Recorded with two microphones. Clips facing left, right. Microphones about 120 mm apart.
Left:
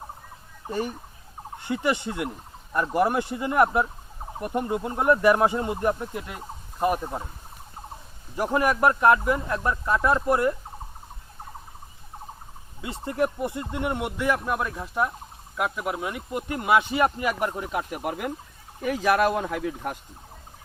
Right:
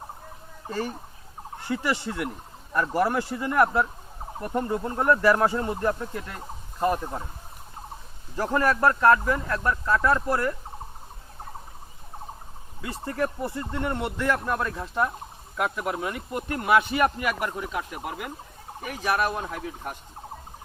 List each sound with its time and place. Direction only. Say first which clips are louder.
0.7 s speech: left 1 dB; 15° left (ahead or behind)
8.4 s speech: left 1 dB; 15° left (ahead or behind)
12.8 s speech: left 2 dB; 20° left (ahead or behind)
17.6 s speech: left 2 dB; 45° left (ahead or behind)
18.9 s speech: left 5 dB; 90° left